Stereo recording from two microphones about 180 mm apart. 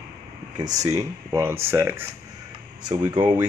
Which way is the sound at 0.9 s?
15° right (ahead or behind).